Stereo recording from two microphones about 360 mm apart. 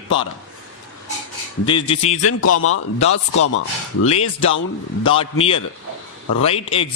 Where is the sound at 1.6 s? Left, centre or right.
Centre.